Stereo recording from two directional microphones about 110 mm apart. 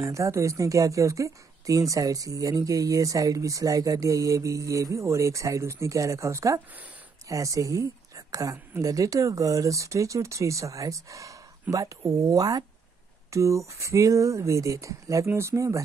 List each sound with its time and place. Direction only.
0.0 s a woman's voice: 30° right (ahead or behind)